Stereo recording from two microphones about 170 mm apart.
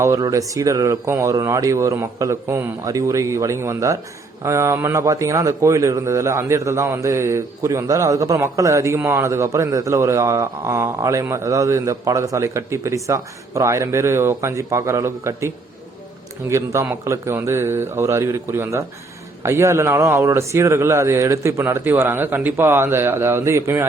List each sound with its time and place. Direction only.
0.0 s a man's voice: 20° right (ahead or behind)